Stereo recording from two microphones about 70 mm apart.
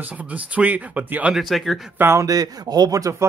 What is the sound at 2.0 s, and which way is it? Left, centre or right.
Speech, right.